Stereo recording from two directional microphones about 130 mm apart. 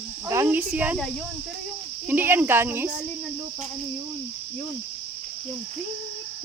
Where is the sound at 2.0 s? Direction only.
15° right (ahead or behind).